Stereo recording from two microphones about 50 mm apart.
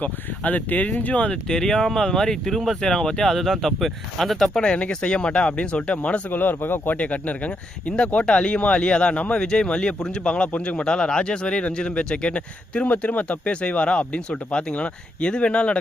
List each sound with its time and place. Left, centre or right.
0.0 s speech: left; by 4.6 s centre
4.6 s speech: left
6.3 s speech: left
6.9 s speech: left